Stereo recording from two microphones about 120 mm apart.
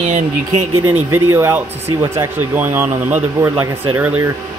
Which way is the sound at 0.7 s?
20° right (ahead or behind).